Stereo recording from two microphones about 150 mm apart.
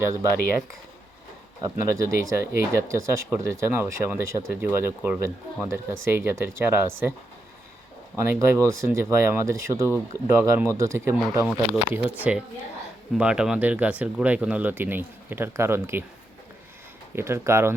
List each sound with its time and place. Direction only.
0.0 s speech: 20° right (ahead or behind)
1.6 s speech: 20° right (ahead or behind)
8.1 s speech: 20° right (ahead or behind)
12.3 s speech: 5° right (ahead or behind)
17.2 s speech: 15° right (ahead or behind)